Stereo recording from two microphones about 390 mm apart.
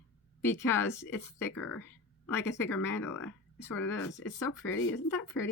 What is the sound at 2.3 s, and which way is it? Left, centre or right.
A woman's voice, centre.